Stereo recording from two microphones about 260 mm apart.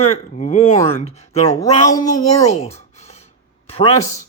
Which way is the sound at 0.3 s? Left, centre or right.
Left.